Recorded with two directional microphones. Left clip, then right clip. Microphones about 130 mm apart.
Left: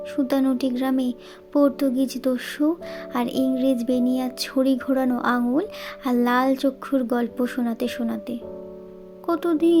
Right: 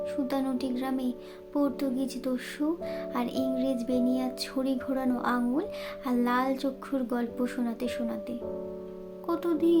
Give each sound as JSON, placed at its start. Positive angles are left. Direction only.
{"t": 0.0, "sound": "speech", "side_deg": 55}